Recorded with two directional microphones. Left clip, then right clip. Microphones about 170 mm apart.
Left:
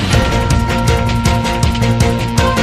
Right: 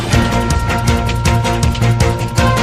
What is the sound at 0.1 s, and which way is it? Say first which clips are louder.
Music: right 1 dB; centre (ahead or behind).